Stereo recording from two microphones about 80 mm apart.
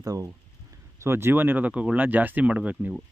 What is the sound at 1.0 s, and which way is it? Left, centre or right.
Speech, right.